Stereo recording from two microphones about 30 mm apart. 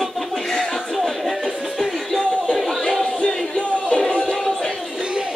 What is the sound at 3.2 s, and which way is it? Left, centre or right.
Music, left.